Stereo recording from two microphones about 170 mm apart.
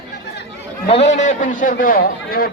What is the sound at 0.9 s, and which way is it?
A man's voice, 40° left (ahead or behind).